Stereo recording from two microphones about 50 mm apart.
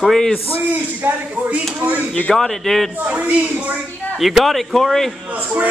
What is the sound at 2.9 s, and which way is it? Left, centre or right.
Speech, right.